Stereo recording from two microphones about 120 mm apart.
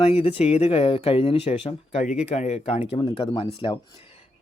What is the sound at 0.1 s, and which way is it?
Speech, 55° left (ahead or behind).